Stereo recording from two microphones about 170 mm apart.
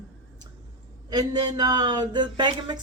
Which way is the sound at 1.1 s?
25° right (ahead or behind).